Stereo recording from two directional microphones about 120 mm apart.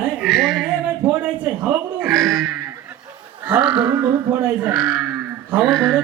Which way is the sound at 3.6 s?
40° right (ahead or behind).